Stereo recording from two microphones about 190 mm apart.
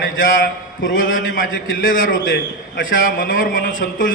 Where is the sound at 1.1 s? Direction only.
90° left.